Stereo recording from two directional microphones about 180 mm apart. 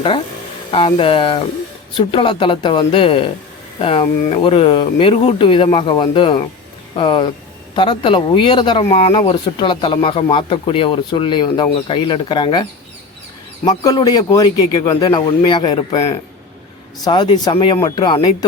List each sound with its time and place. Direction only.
0.7 s speech: 30° left (ahead or behind)
13.7 s speech: 20° left (ahead or behind)